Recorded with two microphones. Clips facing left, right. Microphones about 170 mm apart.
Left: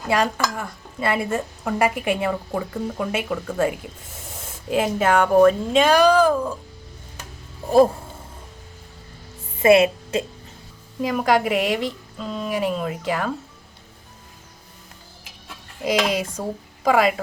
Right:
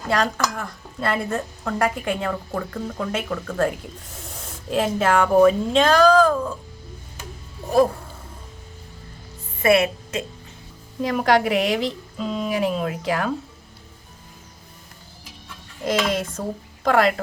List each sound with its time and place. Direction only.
0.1 s speech: 5° left (ahead or behind)
5.8 s speech: 10° left (ahead or behind)
9.6 s a woman's voice: 25° left (ahead or behind)
11.0 s speech: centre (ahead or behind)
15.8 s speech: 10° left (ahead or behind)